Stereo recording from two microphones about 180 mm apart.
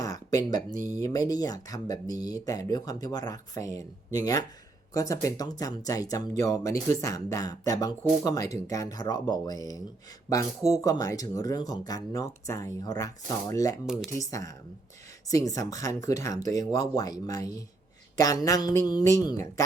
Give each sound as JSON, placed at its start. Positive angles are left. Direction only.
{"t": 0.0, "sound": "a sound", "side_deg": 20}
{"t": 0.7, "sound": "speech", "side_deg": -45}
{"t": 0.9, "sound": "speech", "side_deg": 20}
{"t": 13.8, "sound": "speech", "side_deg": 0}
{"t": 14.2, "sound": "speech", "side_deg": 20}